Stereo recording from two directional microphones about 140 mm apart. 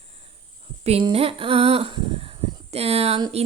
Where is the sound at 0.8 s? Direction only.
45° right (ahead or behind).